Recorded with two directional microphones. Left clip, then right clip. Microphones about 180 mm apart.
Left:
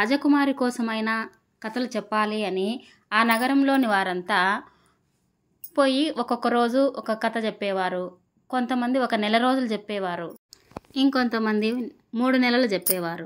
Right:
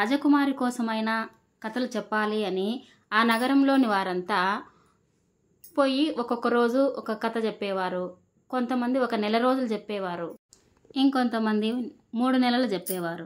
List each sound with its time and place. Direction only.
0.0 s a woman's voice: 10° left (ahead or behind)
5.7 s a woman's voice: 15° left (ahead or behind)